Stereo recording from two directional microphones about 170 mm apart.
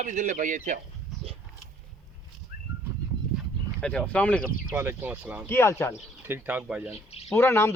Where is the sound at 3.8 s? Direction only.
5° left (ahead or behind).